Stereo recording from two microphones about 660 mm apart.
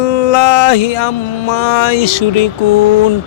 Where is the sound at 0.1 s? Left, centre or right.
Left.